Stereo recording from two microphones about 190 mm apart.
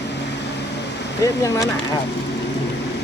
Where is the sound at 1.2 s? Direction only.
15° left (ahead or behind).